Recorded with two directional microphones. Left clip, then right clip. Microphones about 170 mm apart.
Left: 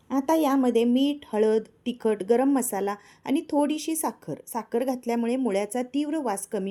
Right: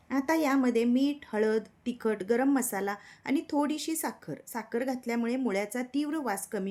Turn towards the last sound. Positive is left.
turn(degrees=20)  # may be behind; listen again after turning